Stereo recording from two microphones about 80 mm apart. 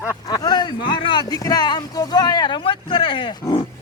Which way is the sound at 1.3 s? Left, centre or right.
Left.